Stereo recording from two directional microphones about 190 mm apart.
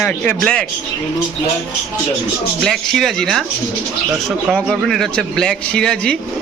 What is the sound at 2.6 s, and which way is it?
Speech, centre (ahead or behind).